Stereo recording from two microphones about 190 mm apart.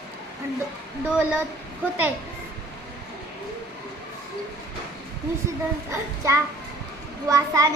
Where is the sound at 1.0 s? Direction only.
10° right (ahead or behind).